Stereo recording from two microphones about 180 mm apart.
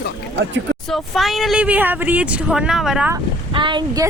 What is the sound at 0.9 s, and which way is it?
Speech, centre (ahead or behind).